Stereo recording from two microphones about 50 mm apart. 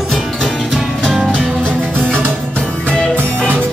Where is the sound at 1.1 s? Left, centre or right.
Centre.